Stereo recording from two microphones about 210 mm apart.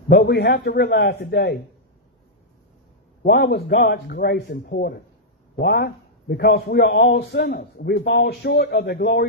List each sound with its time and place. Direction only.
0.1 s a man's voice: 55° left (ahead or behind)
3.3 s a man's voice: 50° left (ahead or behind)